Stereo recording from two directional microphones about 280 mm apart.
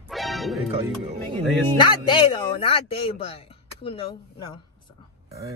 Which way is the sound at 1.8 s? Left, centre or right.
Centre.